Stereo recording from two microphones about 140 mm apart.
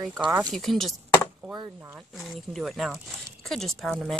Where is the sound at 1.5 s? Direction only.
30° right (ahead or behind).